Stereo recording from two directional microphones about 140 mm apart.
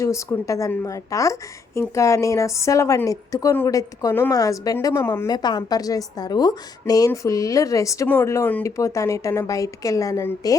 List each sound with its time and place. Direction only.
0.0 s a woman's voice: 20° left (ahead or behind)
5.3 s a woman's voice: 30° left (ahead or behind)